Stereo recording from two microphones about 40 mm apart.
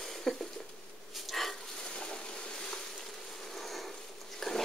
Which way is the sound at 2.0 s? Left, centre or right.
Left.